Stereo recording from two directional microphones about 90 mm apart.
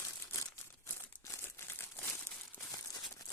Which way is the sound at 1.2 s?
30° left (ahead or behind).